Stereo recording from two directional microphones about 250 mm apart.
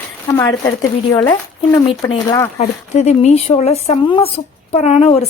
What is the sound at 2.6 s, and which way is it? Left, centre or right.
Speech, left.